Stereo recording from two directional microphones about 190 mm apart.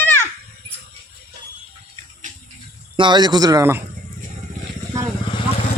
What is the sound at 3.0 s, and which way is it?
Speech, 25° right (ahead or behind).